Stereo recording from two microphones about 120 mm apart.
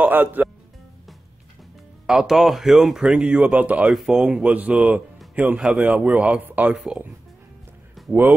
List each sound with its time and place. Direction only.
0.0 s a man's voice: 15° right (ahead or behind)
2.0 s speech: 5° right (ahead or behind)
8.1 s speech: 15° right (ahead or behind)